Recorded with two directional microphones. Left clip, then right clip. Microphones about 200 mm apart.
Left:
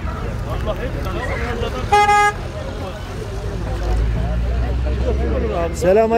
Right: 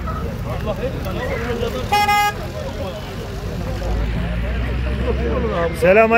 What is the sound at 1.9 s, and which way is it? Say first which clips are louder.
Vehicle: left 3 dB; 55° right (ahead or behind).